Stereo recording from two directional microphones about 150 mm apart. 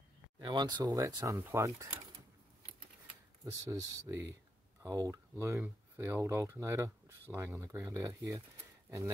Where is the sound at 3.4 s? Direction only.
20° right (ahead or behind).